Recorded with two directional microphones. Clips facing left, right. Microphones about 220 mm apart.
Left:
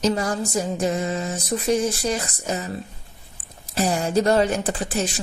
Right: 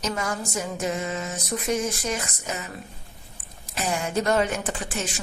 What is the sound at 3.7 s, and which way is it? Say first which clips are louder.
Speech: left 6 dB; 35° left (ahead or behind).